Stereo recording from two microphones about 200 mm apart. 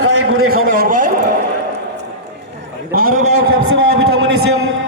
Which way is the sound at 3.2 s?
90° right.